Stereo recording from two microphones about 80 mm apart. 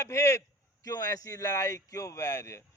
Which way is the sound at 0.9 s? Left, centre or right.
Left.